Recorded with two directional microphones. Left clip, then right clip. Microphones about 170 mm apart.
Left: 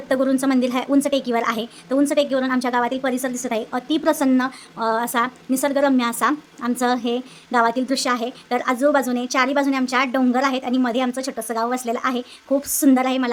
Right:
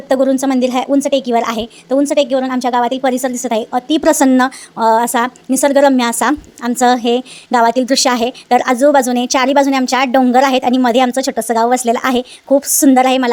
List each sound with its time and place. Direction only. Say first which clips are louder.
0.1 s a woman's voice: right 7 dB; 20° right (ahead or behind)
4.0 s a woman's voice: right 9 dB; 45° right (ahead or behind)